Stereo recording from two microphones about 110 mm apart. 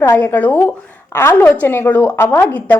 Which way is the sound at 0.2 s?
15° left (ahead or behind).